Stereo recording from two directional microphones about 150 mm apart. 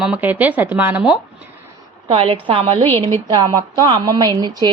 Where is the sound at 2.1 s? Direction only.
40° right (ahead or behind).